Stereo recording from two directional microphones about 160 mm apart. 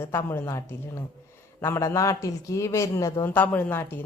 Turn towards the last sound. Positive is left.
turn(degrees=10)  # may be behind; listen again after turning